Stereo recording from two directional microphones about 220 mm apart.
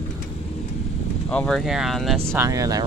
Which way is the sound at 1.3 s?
5° left (ahead or behind).